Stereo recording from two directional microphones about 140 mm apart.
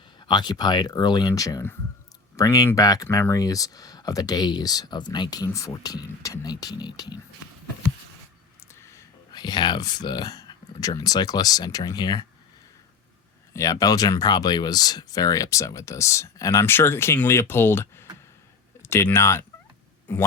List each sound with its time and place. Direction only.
0.2 s speech: 30° left (ahead or behind)
8.6 s speech: 20° left (ahead or behind)
13.5 s speech: 20° left (ahead or behind)